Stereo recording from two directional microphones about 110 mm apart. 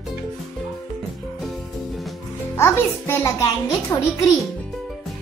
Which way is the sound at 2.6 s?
25° left (ahead or behind).